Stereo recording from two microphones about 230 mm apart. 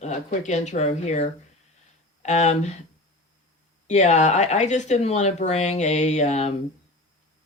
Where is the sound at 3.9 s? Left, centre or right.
Left.